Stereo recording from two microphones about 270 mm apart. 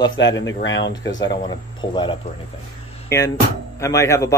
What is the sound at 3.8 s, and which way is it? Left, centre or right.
Speech, centre.